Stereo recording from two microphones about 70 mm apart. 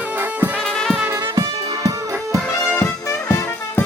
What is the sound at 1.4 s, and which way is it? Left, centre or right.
Music, right.